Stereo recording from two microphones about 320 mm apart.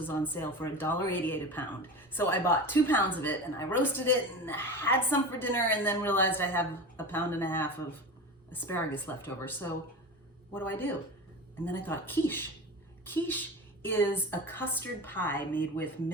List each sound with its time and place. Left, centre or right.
0.0 s speech: centre